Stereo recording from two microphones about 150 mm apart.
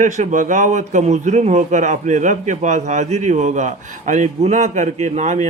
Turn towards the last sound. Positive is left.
turn(degrees=-50)  # may be behind; listen again after turning